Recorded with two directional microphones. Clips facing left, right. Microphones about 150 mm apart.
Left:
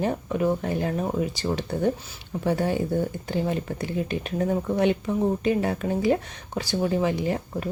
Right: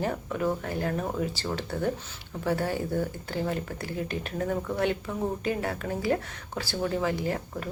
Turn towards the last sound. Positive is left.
turn(degrees=20)  # may be behind; listen again after turning